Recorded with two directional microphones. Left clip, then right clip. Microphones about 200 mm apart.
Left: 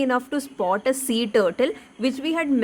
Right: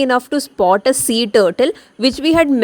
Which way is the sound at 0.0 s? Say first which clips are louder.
Right 8 dB; 35° right (ahead or behind).